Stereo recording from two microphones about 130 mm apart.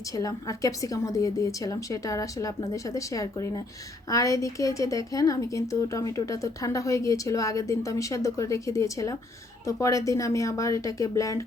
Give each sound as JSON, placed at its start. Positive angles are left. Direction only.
{"t": 0.1, "sound": "a woman's voice", "side_deg": 25}